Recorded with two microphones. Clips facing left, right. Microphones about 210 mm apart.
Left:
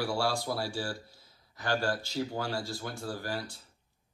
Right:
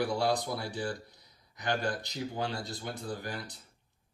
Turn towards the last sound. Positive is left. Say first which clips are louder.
# left 2 dB
turn(degrees=-20)  # may be behind; listen again after turning